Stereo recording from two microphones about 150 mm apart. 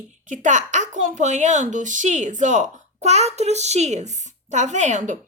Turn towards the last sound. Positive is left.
turn(degrees=-50)  # may be behind; listen again after turning